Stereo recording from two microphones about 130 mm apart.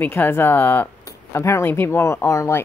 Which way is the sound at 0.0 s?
15° left (ahead or behind).